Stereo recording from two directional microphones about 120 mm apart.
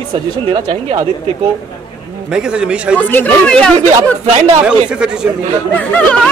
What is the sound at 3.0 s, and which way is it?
Speech, 15° left (ahead or behind).